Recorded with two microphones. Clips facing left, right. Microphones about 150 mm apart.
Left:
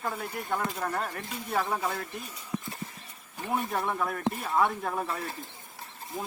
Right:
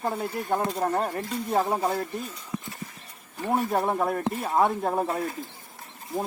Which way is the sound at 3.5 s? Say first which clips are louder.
Right 5 dB; 30° right (ahead or behind).